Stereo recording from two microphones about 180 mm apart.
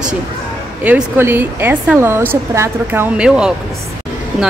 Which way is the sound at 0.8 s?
10° right (ahead or behind).